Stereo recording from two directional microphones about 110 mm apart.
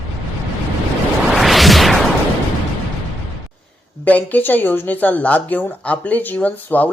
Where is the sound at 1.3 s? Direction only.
Centre (ahead or behind).